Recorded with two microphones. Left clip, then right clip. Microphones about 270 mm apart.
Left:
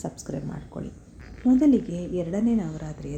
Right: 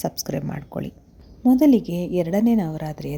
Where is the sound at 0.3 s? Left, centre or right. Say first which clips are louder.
Right 6 dB; right.